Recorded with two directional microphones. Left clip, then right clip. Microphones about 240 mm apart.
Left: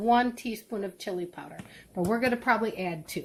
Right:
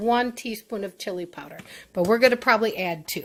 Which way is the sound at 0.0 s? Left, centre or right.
Right.